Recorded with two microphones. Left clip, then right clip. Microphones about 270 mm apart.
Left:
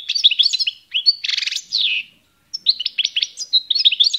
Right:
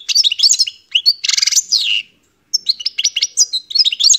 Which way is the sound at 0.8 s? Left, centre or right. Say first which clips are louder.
Right 5 dB; centre.